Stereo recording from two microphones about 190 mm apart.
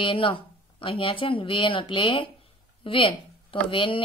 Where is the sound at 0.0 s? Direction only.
25° left (ahead or behind).